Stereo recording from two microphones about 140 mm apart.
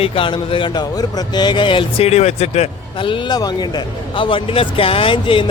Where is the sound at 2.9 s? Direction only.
35° left (ahead or behind).